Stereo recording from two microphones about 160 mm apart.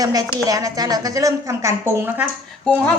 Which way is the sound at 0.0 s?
25° right (ahead or behind).